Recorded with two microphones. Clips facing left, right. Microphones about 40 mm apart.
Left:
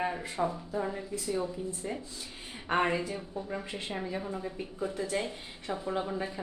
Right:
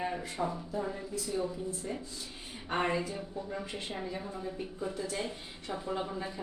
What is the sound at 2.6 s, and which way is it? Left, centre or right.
A woman's voice, left.